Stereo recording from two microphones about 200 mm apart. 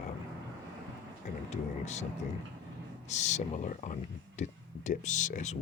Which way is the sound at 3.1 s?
35° left (ahead or behind).